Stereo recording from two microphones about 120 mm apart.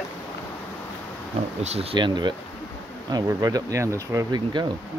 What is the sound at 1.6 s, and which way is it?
Speech, 60° right (ahead or behind).